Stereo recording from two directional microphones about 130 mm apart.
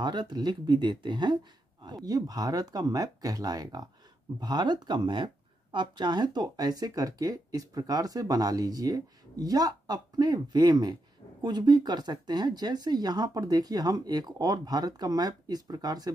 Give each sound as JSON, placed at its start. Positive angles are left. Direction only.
{"t": 0.0, "sound": "speech", "side_deg": -35}